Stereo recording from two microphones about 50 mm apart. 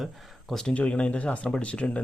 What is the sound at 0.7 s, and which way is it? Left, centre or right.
Speech, left.